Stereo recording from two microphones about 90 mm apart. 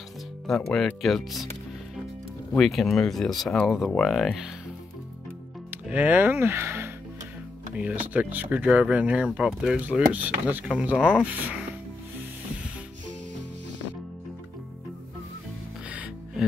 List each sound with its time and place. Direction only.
0.7 s speech: centre (ahead or behind)
2.5 s speech: centre (ahead or behind)
5.7 s speech: 15° right (ahead or behind)
7.7 s speech: 15° right (ahead or behind)